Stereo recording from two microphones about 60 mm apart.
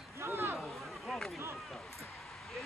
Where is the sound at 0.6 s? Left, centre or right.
Centre.